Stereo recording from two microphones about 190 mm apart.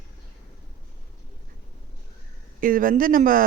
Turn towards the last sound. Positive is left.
turn(degrees=-45)  # may be behind; listen again after turning